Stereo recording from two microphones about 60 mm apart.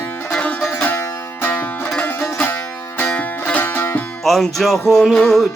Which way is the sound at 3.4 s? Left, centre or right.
Left.